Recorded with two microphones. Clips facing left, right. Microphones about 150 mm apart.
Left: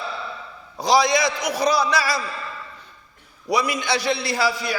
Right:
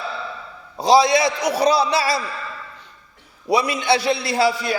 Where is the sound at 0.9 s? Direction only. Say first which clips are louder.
Right 4 dB; 25° right (ahead or behind).